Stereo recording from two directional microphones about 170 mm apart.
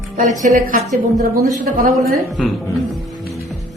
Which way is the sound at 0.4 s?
55° right (ahead or behind).